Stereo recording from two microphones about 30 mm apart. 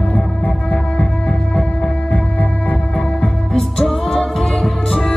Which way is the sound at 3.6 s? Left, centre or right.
Centre.